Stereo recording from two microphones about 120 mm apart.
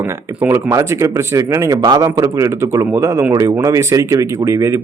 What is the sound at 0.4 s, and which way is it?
Speech, 25° right (ahead or behind).